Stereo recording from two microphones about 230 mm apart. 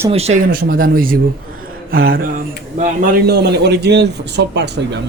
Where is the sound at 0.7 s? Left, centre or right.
Right.